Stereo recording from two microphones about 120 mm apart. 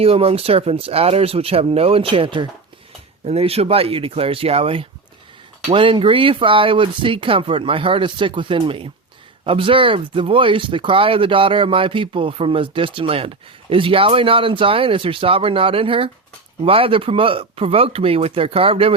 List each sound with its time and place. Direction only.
0.0 s speech: 55° right (ahead or behind)
3.2 s speech: 60° right (ahead or behind)